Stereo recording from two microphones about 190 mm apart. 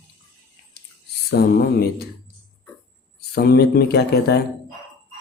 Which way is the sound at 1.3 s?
55° left (ahead or behind).